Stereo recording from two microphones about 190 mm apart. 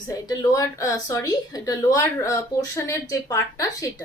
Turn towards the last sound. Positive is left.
turn(degrees=15)  # may be behind; listen again after turning